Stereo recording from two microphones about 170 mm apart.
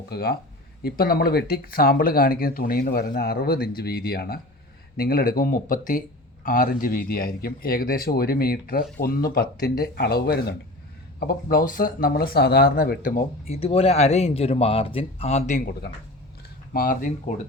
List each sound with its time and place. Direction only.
0.1 s speech: 65° left (ahead or behind)
11.2 s speech: 60° left (ahead or behind)
13.5 s speech: 35° left (ahead or behind)
16.7 s speech: 55° left (ahead or behind)